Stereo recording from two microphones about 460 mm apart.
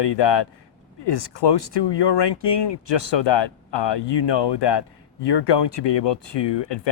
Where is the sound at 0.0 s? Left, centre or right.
Left.